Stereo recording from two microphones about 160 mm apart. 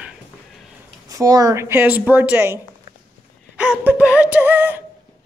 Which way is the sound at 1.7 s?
10° right (ahead or behind).